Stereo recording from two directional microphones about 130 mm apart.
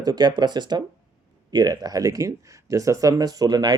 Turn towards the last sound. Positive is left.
turn(degrees=-30)  # may be behind; listen again after turning